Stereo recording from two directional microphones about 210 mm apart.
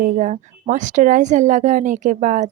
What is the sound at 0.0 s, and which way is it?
Speech, 35° right (ahead or behind).